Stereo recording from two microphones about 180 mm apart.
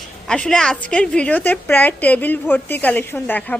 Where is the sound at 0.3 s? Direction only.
5° left (ahead or behind).